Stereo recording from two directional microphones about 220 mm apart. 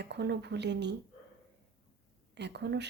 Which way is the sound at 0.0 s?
50° right (ahead or behind).